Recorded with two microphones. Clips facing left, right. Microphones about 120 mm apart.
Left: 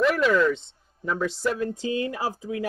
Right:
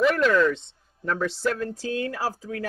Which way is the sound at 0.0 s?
5° left (ahead or behind).